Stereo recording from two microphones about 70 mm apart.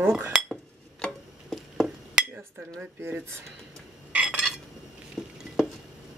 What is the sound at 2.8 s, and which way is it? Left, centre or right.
Speech, right.